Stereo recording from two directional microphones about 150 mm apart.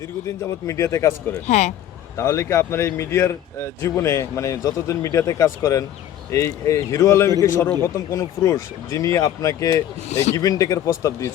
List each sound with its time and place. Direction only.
0.3 s speech: 20° left (ahead or behind)
1.5 s speech: 50° left (ahead or behind)
2.1 s speech: 20° left (ahead or behind)
10.1 s speech: 45° left (ahead or behind)
10.3 s speech: 25° left (ahead or behind)